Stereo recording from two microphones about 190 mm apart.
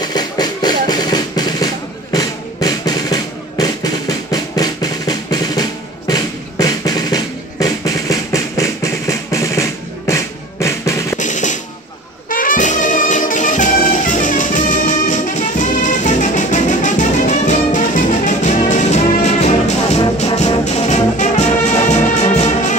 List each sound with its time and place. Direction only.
0.0 s drum: 20° left (ahead or behind)
11.1 s drum: 40° left (ahead or behind)
12.3 s music: 45° left (ahead or behind)
20.2 s brass instrument: 35° left (ahead or behind)